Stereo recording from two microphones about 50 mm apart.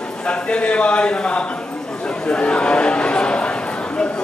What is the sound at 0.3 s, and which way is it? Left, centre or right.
A man's voice, left.